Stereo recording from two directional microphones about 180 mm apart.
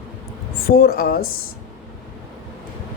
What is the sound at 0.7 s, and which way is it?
Speech, 55° left (ahead or behind).